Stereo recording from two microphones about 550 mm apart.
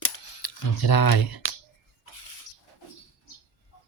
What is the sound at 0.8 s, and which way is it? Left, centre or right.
Speech, left.